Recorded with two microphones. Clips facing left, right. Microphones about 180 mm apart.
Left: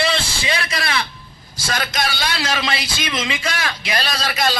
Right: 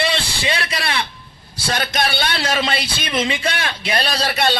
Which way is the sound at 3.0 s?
30° right (ahead or behind).